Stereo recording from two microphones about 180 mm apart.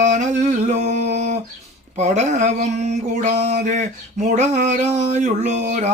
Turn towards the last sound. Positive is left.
turn(degrees=-40)  # may be behind; listen again after turning